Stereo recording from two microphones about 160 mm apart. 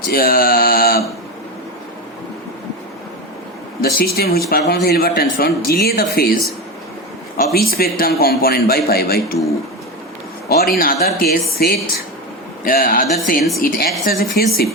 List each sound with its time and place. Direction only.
0.0 s a sound: 65° left (ahead or behind)
3.8 s speech: 70° left (ahead or behind)
7.3 s speech: 70° left (ahead or behind)
10.5 s a woman's voice: 75° left (ahead or behind)